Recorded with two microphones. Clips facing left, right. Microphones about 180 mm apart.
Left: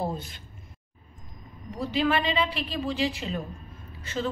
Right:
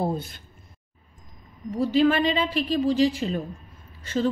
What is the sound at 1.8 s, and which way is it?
A woman's voice, 45° right (ahead or behind).